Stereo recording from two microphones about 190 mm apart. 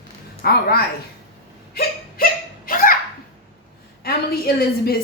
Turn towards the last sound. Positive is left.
turn(degrees=55)  # may be behind; listen again after turning